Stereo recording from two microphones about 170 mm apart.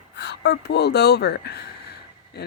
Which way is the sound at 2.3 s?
75° left (ahead or behind).